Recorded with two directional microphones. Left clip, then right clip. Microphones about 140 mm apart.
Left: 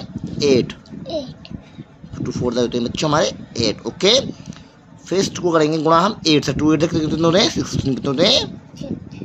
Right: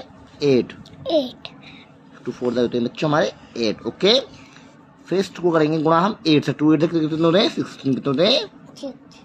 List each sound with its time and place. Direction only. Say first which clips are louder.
0.4 s speech: left 2 dB; 20° left (ahead or behind)
2.2 s speech: left 1 dB; 20° left (ahead or behind)